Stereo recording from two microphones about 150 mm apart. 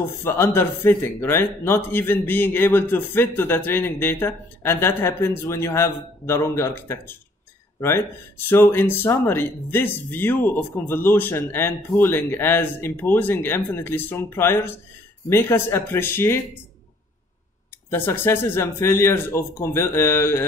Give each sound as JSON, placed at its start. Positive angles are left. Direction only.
{"t": 0.2, "sound": "speech", "side_deg": 15}
{"t": 17.8, "sound": "speech", "side_deg": 15}